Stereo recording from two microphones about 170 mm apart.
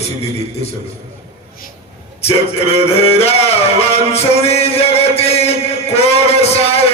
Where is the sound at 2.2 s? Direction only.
35° left (ahead or behind).